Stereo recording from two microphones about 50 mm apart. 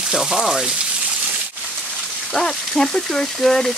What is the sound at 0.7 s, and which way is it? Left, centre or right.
Rain, centre.